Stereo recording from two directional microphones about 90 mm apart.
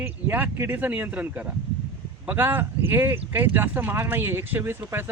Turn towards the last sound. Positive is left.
turn(degrees=-25)  # may be behind; listen again after turning